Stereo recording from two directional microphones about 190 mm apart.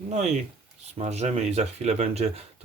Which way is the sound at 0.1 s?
35° right (ahead or behind).